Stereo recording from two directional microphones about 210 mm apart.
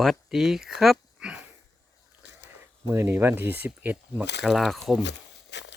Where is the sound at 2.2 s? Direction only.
55° left (ahead or behind).